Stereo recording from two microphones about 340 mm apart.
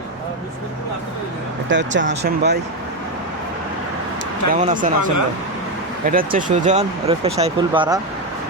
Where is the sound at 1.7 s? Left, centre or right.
Right.